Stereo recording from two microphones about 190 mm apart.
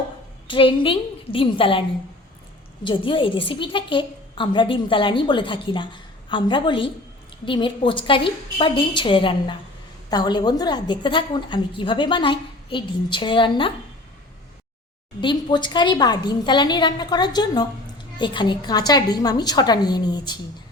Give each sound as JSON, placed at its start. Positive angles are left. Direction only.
{"t": 0.4, "sound": "a woman's voice", "side_deg": 25}
{"t": 2.8, "sound": "a woman's voice", "side_deg": 25}
{"t": 15.2, "sound": "a woman's voice", "side_deg": 25}